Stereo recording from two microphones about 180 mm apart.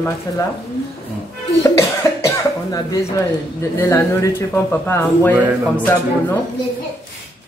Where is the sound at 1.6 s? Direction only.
15° left (ahead or behind).